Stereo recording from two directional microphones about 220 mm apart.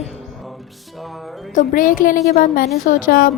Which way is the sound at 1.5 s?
40° left (ahead or behind).